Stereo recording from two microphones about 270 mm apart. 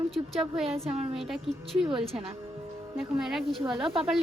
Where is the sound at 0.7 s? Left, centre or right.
Right.